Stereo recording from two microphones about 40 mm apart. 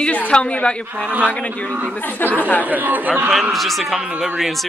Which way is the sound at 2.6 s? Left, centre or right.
Right.